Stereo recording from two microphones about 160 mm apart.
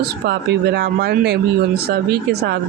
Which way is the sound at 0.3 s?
90° right.